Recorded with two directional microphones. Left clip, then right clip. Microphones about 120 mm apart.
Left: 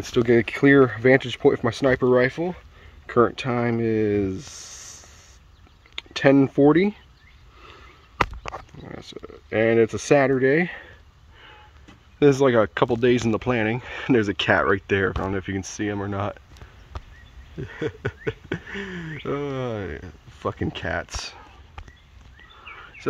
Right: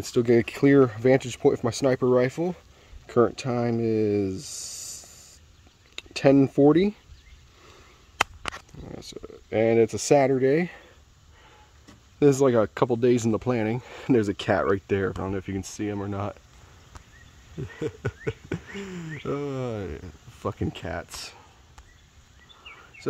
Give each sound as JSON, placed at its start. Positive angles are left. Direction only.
{"t": 0.0, "sound": "speech", "side_deg": -15}
{"t": 2.3, "sound": "speech", "side_deg": -35}
{"t": 3.2, "sound": "speech", "side_deg": -15}
{"t": 5.9, "sound": "speech", "side_deg": -20}
{"t": 8.8, "sound": "speech", "side_deg": -15}
{"t": 12.2, "sound": "speech", "side_deg": -15}
{"t": 17.6, "sound": "speech", "side_deg": -15}
{"t": 22.7, "sound": "a sound", "side_deg": -10}